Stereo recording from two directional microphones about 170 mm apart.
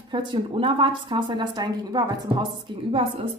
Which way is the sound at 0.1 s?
30° right (ahead or behind).